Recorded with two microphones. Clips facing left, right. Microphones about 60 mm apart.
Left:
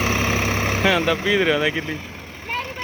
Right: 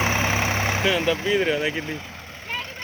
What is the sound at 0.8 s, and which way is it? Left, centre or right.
Speech, left.